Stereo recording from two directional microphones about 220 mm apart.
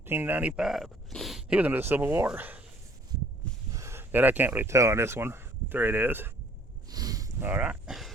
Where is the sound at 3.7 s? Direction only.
15° right (ahead or behind).